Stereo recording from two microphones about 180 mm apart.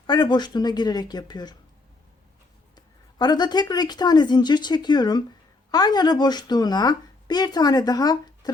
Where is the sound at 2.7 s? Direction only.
25° left (ahead or behind).